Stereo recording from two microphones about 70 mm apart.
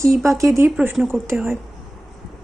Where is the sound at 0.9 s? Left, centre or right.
Centre.